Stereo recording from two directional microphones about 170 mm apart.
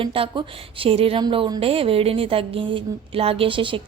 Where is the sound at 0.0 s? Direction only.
30° right (ahead or behind).